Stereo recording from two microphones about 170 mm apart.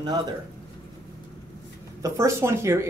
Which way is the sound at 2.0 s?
15° right (ahead or behind).